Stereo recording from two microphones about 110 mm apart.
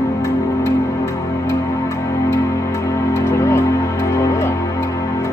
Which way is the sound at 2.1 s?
25° left (ahead or behind).